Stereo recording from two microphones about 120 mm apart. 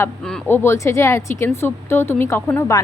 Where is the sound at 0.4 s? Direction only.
20° left (ahead or behind).